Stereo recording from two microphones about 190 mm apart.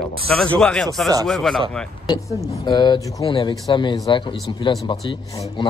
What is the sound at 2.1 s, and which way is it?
A man's voice, 20° left (ahead or behind).